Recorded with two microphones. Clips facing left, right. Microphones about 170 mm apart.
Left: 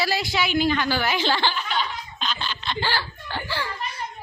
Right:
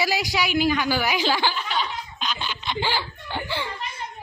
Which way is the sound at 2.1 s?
10° right (ahead or behind).